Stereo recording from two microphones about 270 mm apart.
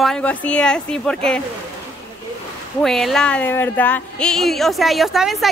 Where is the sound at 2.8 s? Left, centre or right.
Centre.